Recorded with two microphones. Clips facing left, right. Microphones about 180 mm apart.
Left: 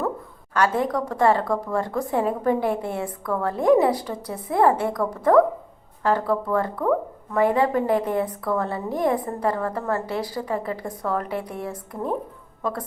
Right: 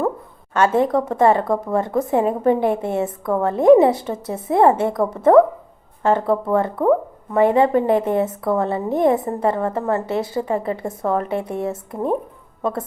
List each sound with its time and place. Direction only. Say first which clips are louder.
0.5 s speech: right 5 dB; 25° right (ahead or behind)